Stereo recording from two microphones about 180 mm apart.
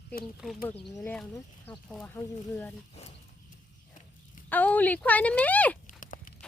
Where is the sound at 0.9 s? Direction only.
10° left (ahead or behind).